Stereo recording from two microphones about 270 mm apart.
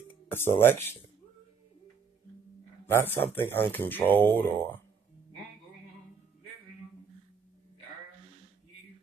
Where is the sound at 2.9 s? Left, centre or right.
Centre.